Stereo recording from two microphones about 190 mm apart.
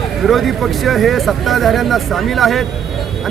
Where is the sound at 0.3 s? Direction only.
Centre (ahead or behind).